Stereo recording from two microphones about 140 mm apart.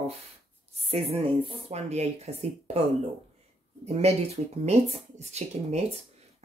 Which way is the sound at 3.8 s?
50° right (ahead or behind).